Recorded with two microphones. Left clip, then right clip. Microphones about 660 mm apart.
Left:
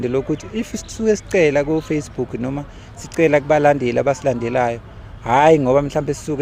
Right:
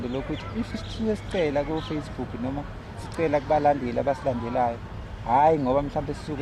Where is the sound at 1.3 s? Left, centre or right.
Left.